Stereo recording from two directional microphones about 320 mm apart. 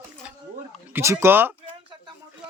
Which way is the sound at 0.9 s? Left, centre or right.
Centre.